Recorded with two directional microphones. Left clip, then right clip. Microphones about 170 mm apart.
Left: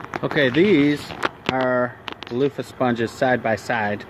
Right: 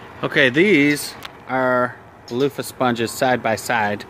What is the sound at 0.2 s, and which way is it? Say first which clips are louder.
Speech: right 3 dB; 5° right (ahead or behind).